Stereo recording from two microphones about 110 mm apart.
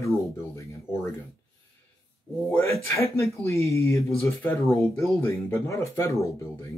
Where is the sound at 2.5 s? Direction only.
20° left (ahead or behind).